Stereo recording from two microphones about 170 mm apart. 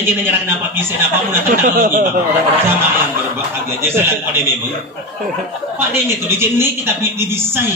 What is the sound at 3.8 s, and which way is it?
Speech, 15° right (ahead or behind).